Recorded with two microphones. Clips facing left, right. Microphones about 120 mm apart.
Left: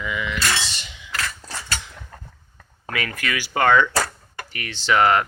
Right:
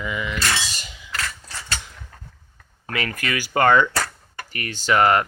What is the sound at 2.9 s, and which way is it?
Speech, 40° right (ahead or behind).